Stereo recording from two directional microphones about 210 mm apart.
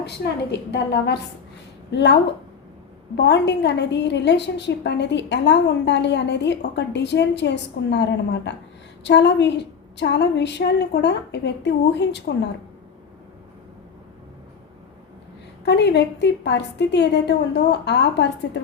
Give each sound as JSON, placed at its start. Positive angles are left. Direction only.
{"t": 0.5, "sound": "a woman's voice", "side_deg": 55}
{"t": 3.2, "sound": "a woman's voice", "side_deg": 55}
{"t": 15.6, "sound": "a woman's voice", "side_deg": 55}